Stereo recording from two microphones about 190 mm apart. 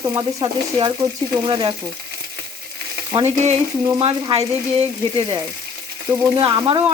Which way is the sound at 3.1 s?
35° right (ahead or behind).